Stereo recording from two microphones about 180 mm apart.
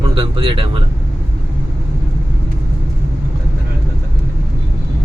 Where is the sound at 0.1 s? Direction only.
30° right (ahead or behind).